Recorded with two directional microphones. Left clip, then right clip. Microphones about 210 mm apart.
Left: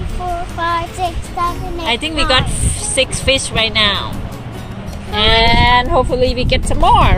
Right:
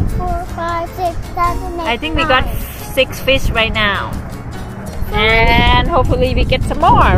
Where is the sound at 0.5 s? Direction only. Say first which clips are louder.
Left 3 dB; 55° right (ahead or behind).